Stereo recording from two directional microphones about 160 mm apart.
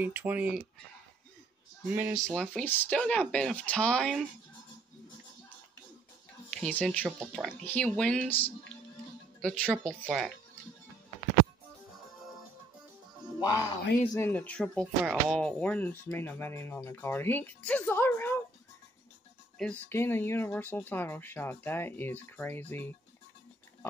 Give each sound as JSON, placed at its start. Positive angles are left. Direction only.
{"t": 0.0, "sound": "speech", "side_deg": -10}
{"t": 1.9, "sound": "speech", "side_deg": -10}
{"t": 2.2, "sound": "speech", "side_deg": 5}
{"t": 6.5, "sound": "speech", "side_deg": 5}
{"t": 13.4, "sound": "speech", "side_deg": 20}
{"t": 19.6, "sound": "speech", "side_deg": 10}